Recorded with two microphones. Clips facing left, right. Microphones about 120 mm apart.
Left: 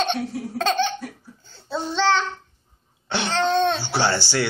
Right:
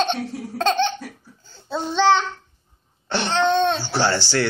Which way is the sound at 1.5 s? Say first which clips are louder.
Right 1 dB; 10° right (ahead or behind).